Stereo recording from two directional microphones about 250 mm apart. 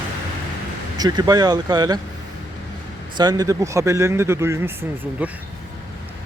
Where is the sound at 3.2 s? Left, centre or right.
Centre.